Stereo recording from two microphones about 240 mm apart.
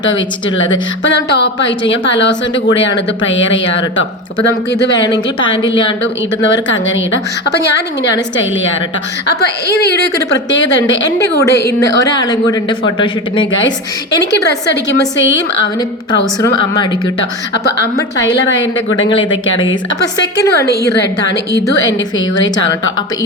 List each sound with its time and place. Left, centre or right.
1.0 s a woman's voice: left
6.5 s a woman's voice: left
9.2 s a woman's voice: left
9.6 s speech: centre
14.3 s a woman's voice: left
16.4 s speech: centre
18.3 s a woman's voice: left
20.1 s speech: centre
22.4 s speech: centre